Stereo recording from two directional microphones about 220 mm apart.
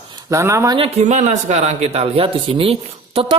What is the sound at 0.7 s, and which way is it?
A man's voice, 30° right (ahead or behind).